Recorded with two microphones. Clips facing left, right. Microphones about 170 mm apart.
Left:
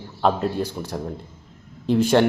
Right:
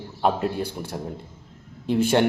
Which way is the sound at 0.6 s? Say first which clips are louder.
Left 2 dB; 55° right (ahead or behind).